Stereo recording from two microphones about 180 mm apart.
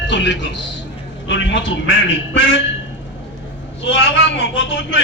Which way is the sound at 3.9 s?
90° left.